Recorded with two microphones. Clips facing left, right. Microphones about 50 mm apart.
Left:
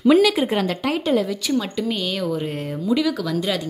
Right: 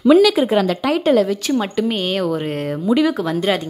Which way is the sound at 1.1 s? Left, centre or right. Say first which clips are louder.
Right 4 dB; right.